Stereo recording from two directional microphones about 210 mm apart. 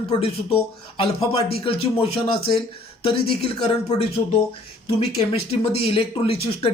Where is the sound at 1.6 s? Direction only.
25° left (ahead or behind).